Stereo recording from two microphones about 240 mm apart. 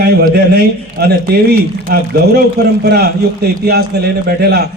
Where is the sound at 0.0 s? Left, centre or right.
Right.